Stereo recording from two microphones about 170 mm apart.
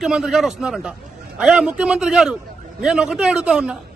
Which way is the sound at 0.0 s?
5° right (ahead or behind).